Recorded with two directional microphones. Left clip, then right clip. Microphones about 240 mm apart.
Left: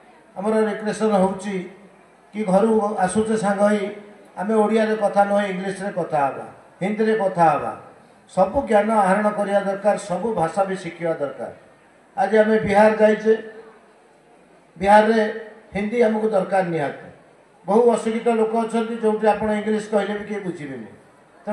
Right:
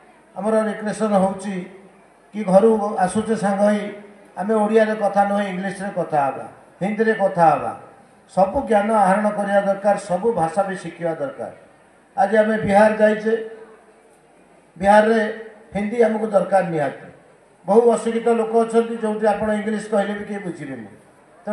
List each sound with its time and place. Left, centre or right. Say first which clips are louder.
0.4 s a man's voice: right 1 dB; right
12.2 s a man's voice: even; right
14.8 s a man's voice: even; right